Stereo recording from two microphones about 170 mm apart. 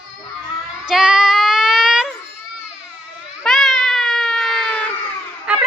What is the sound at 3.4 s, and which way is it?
Baby cry, centre (ahead or behind).